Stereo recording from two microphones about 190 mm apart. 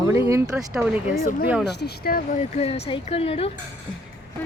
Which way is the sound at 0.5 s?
Centre (ahead or behind).